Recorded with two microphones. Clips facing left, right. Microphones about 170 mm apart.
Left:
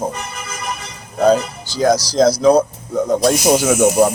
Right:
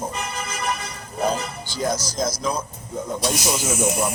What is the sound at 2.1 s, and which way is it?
Speech, 70° left (ahead or behind).